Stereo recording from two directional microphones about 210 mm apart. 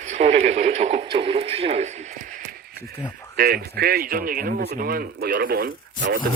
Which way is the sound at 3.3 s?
45° right (ahead or behind).